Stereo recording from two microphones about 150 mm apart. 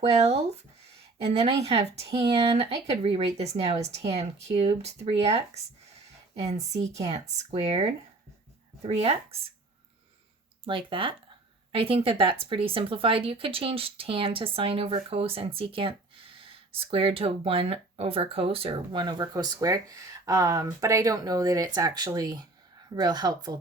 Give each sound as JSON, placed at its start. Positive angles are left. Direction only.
{"t": 0.1, "sound": "speech", "side_deg": -45}
{"t": 7.0, "sound": "speech", "side_deg": -45}
{"t": 10.7, "sound": "speech", "side_deg": -35}